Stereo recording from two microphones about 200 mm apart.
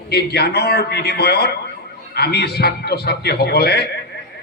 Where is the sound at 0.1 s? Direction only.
55° left (ahead or behind).